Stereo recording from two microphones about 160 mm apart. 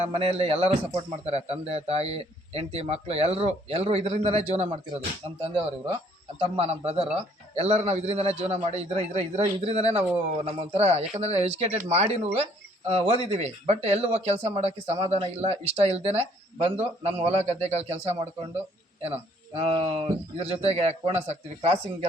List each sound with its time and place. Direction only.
0.0 s speech: 40° right (ahead or behind)
6.6 s speech: 40° right (ahead or behind)